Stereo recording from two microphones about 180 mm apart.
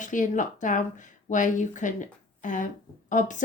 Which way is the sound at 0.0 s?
45° left (ahead or behind).